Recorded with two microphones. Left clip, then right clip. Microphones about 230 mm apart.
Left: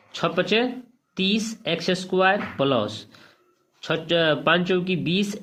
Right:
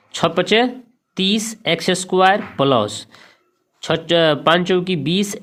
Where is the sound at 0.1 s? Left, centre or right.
Right.